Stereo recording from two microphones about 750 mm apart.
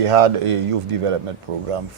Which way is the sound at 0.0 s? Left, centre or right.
Right.